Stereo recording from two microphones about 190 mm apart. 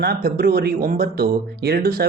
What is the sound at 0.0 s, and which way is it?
Speech, 55° right (ahead or behind).